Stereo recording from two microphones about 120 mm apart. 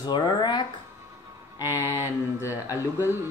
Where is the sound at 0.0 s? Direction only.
40° left (ahead or behind).